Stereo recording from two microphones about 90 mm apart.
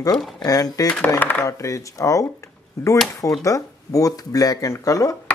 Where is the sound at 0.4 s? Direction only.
45° left (ahead or behind).